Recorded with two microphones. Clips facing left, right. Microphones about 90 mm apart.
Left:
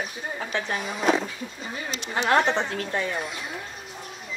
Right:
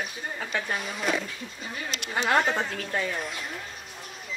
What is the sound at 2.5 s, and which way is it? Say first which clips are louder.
Speech: left 3 dB; 20° left (ahead or behind).